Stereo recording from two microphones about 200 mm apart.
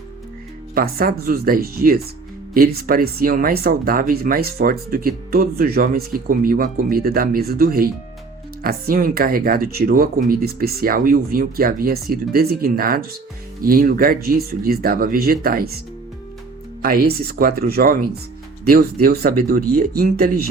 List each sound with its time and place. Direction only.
0.7 s speech: 45° right (ahead or behind)
16.8 s speech: 45° right (ahead or behind)